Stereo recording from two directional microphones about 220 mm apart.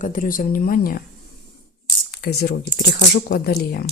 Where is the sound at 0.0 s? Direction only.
35° left (ahead or behind).